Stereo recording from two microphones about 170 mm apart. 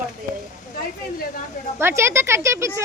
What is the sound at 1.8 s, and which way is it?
Speech, 15° right (ahead or behind).